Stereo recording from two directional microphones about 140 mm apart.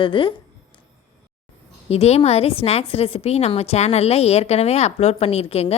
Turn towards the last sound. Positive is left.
turn(degrees=45)  # may be behind; listen again after turning